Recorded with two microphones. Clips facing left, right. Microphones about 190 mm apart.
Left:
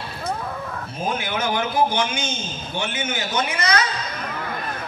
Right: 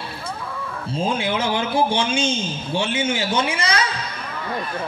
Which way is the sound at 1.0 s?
30° right (ahead or behind).